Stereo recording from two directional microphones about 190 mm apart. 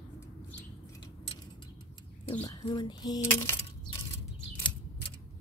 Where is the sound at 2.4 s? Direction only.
20° left (ahead or behind).